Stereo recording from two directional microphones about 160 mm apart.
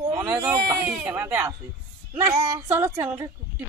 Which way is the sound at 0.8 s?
15° right (ahead or behind).